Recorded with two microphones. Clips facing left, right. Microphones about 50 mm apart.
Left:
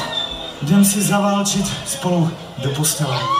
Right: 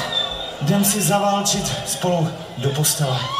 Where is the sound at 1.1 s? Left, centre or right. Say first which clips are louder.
Left 1 dB; left.